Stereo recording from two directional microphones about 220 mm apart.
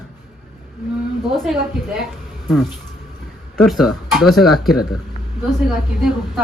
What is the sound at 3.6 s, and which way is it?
A man's voice, centre (ahead or behind).